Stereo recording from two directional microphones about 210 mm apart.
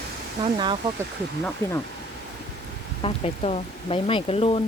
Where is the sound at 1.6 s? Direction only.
10° left (ahead or behind).